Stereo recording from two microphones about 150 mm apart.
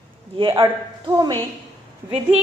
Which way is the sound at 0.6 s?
25° right (ahead or behind).